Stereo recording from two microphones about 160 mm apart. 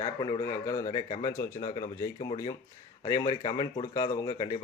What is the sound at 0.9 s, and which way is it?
Speech, 45° left (ahead or behind).